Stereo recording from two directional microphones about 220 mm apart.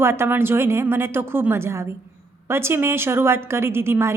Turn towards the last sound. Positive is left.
turn(degrees=-10)  # may be behind; listen again after turning